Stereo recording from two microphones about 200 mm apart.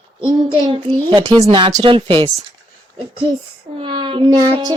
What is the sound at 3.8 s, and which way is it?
Child singing, 25° right (ahead or behind).